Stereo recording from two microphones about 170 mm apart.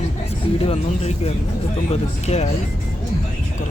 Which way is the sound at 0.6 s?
35° left (ahead or behind).